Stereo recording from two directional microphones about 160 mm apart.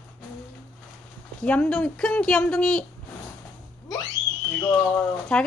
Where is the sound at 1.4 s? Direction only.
10° left (ahead or behind).